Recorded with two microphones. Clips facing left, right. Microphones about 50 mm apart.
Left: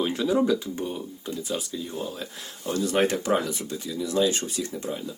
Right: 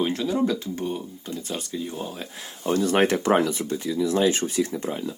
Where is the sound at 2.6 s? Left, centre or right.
Right.